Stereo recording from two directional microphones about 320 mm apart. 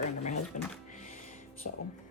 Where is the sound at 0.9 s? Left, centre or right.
Left.